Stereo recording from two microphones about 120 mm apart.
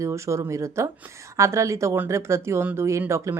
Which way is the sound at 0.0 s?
25° right (ahead or behind).